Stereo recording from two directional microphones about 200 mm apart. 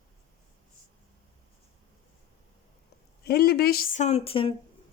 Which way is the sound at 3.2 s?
50° left (ahead or behind).